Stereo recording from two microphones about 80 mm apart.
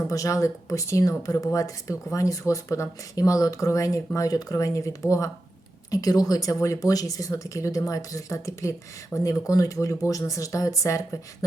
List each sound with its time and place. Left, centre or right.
0.1 s speech: left